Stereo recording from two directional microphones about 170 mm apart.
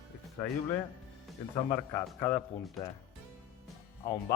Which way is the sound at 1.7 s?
20° left (ahead or behind).